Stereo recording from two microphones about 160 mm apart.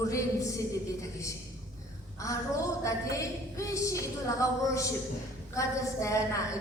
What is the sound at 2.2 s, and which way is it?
A woman's voice, 20° left (ahead or behind).